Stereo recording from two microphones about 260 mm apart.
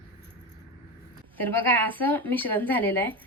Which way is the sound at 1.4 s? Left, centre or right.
Centre.